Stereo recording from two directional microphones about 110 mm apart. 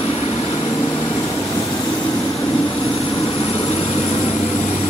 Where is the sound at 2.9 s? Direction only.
50° left (ahead or behind).